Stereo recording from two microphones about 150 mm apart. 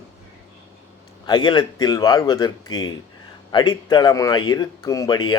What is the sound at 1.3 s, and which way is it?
Speech, 30° left (ahead or behind).